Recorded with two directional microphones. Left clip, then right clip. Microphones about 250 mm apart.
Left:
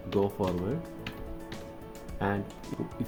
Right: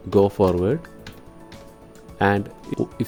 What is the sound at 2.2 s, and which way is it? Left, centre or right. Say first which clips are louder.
Speech: right 12 dB; right.